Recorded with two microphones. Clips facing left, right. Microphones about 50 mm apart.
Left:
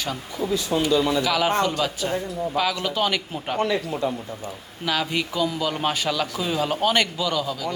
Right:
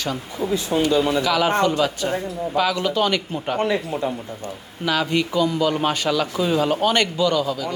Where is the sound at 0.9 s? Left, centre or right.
Right.